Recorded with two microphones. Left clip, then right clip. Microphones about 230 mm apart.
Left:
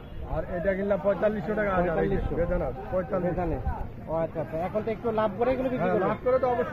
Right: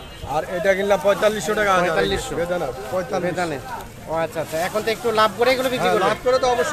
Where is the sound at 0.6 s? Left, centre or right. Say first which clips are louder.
Right 8 dB; right.